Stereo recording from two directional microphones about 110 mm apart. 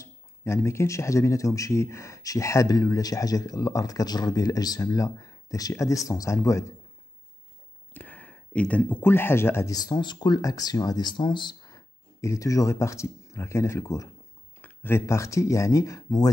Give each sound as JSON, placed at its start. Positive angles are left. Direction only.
{"t": 0.0, "sound": "speech", "side_deg": 25}
{"t": 7.9, "sound": "speech", "side_deg": 15}
{"t": 9.8, "sound": "speech", "side_deg": 40}